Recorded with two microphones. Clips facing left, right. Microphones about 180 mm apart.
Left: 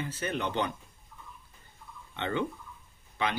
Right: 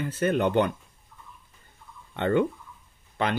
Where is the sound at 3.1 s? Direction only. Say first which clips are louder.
Right 5 dB; 50° right (ahead or behind).